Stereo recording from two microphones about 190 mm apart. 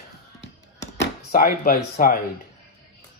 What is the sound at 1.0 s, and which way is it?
Speech, 50° left (ahead or behind).